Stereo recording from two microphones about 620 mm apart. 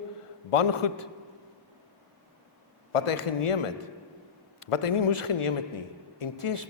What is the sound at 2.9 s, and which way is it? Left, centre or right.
Speech, left.